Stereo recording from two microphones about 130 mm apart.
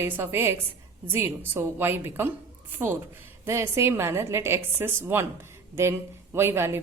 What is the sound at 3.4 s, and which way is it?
A woman's voice, 20° right (ahead or behind).